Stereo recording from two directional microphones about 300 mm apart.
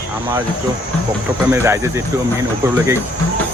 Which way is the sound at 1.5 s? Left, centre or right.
Centre.